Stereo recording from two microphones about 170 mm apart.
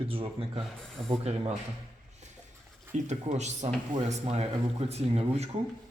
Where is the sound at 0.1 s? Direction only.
35° right (ahead or behind).